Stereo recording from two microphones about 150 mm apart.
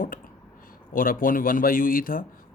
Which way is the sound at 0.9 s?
70° left (ahead or behind).